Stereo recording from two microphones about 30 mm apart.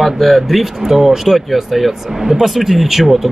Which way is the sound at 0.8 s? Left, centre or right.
Centre.